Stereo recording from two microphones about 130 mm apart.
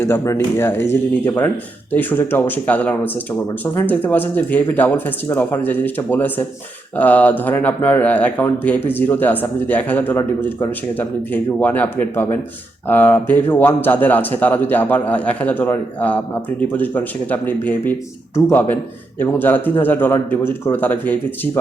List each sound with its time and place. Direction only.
0.0 s a man's voice: 20° left (ahead or behind)